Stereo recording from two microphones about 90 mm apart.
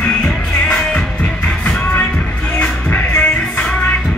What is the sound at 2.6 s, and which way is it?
Music, 20° left (ahead or behind).